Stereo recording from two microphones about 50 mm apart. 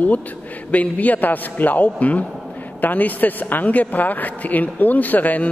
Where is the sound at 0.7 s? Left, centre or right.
Left.